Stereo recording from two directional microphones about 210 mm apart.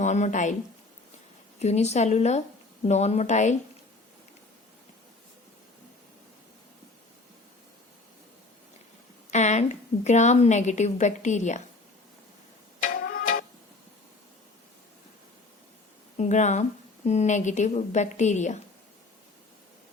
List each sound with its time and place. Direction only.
0.0 s a woman's voice: 35° left (ahead or behind)
1.5 s a woman's voice: 30° left (ahead or behind)
9.3 s a woman's voice: 35° left (ahead or behind)
12.8 s music: 40° left (ahead or behind)
16.1 s a woman's voice: 35° left (ahead or behind)